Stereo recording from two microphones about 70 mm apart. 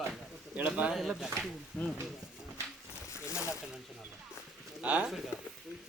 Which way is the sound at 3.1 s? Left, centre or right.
Left.